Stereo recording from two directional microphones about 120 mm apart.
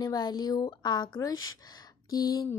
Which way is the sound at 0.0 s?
35° left (ahead or behind).